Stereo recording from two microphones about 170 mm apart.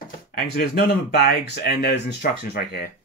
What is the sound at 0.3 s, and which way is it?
Speech, 65° left (ahead or behind).